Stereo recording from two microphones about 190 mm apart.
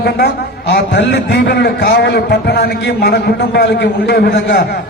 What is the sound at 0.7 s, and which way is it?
A man's voice, 65° left (ahead or behind).